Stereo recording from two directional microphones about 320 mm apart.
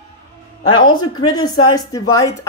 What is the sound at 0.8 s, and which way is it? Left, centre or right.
Speech, centre.